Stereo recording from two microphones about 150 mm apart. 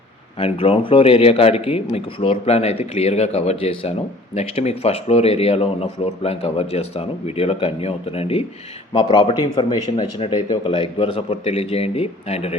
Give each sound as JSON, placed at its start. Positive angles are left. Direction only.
{"t": 0.3, "sound": "speech", "side_deg": 40}
{"t": 8.9, "sound": "speech", "side_deg": 30}